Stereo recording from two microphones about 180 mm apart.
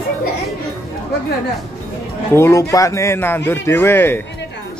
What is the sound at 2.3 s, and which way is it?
Speech, 15° left (ahead or behind).